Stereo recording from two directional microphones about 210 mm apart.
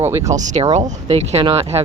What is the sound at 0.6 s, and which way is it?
Speech, 25° right (ahead or behind).